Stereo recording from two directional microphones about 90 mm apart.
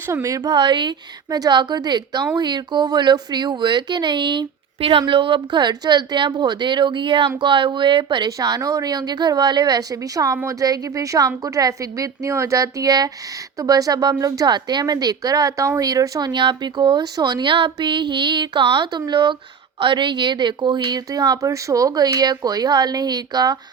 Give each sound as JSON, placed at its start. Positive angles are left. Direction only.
{"t": 0.1, "sound": "speech", "side_deg": -40}
{"t": 8.4, "sound": "a woman's voice", "side_deg": -45}
{"t": 16.3, "sound": "speech", "side_deg": -55}
{"t": 17.0, "sound": "speech", "side_deg": -45}